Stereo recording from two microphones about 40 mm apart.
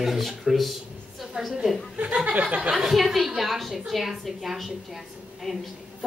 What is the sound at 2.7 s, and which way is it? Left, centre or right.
A woman's voice, centre.